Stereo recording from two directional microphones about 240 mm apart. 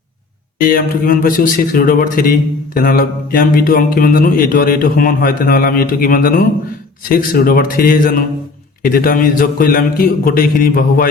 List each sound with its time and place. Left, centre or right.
0.6 s speech: left